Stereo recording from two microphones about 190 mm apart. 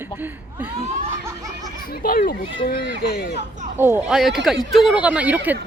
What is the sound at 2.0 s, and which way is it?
Speech, 50° left (ahead or behind).